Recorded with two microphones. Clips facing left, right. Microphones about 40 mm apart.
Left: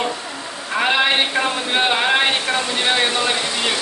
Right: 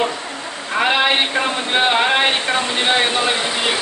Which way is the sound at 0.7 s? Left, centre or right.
Centre.